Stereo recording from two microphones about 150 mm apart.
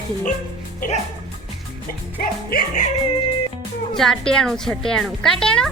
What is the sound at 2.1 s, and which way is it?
Speech, 75° left (ahead or behind).